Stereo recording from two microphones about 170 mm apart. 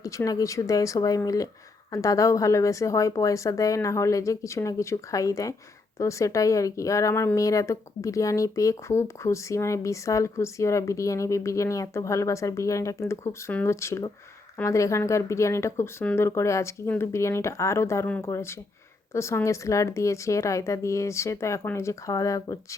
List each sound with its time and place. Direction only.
0.0 s a woman's voice: 20° left (ahead or behind)